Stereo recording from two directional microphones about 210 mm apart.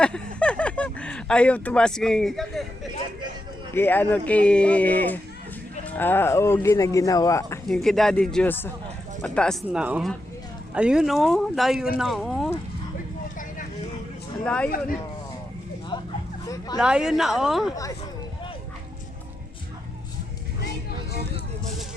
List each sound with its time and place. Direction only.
0.3 s a sound: 5° left (ahead or behind)
3.8 s speech: 10° left (ahead or behind)
7.7 s speech: centre (ahead or behind)
14.4 s speech: 5° left (ahead or behind)
15.9 s a sound: 20° left (ahead or behind)
16.7 s speech: 5° right (ahead or behind)